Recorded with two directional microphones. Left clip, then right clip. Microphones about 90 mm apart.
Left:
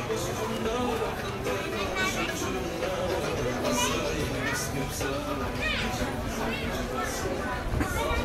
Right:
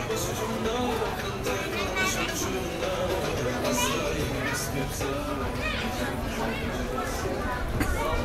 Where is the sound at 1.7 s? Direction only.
10° right (ahead or behind).